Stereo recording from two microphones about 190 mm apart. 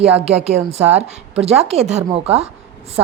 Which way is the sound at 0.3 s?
35° right (ahead or behind).